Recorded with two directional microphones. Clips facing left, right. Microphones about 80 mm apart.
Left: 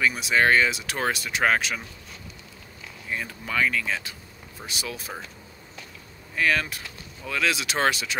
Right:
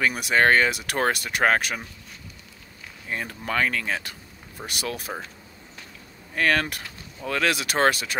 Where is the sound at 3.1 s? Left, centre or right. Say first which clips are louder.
Right 1 dB; right.